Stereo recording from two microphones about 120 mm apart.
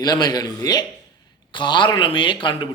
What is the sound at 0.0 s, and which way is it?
A man's voice, 35° left (ahead or behind).